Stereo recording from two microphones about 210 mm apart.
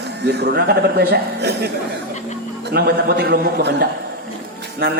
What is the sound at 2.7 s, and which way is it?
A man's voice, 50° right (ahead or behind).